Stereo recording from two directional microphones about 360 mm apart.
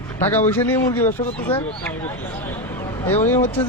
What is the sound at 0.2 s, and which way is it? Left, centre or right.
Speech, centre.